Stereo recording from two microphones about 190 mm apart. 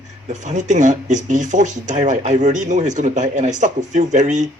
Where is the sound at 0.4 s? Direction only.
40° right (ahead or behind).